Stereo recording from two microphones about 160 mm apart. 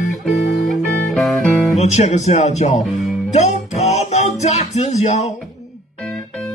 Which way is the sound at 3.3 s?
45° left (ahead or behind).